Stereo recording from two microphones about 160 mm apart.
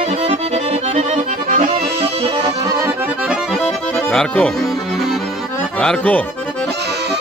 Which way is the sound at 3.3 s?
Centre (ahead or behind).